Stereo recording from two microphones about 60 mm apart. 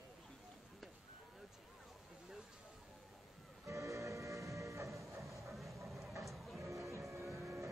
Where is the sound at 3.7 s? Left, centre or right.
Right.